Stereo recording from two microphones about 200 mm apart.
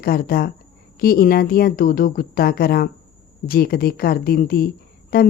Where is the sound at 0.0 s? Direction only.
50° left (ahead or behind).